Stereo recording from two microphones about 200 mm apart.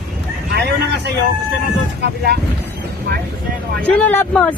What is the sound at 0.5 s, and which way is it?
Vehicle, 55° right (ahead or behind).